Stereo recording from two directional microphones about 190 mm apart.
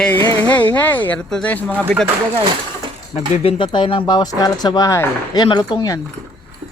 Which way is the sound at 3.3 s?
30° left (ahead or behind).